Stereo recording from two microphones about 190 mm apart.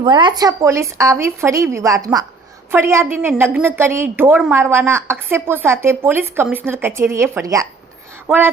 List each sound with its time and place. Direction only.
0.0 s a woman's voice: 25° right (ahead or behind)